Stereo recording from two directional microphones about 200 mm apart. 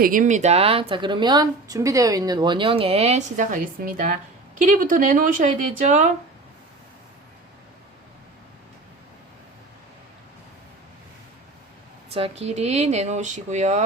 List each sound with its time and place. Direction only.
0.0 s a woman's voice: 40° right (ahead or behind)
12.1 s speech: 30° right (ahead or behind)